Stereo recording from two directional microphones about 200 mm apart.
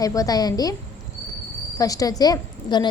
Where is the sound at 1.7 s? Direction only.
15° left (ahead or behind).